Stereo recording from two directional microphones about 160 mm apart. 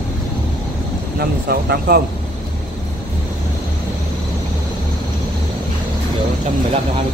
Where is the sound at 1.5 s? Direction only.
75° right (ahead or behind).